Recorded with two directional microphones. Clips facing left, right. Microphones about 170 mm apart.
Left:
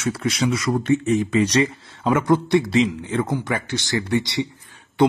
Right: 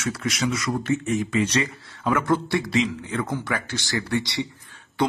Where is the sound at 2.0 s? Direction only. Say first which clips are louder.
Left 4 dB; 20° left (ahead or behind).